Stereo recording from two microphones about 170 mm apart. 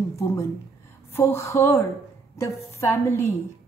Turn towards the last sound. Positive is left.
turn(degrees=15)  # may be behind; listen again after turning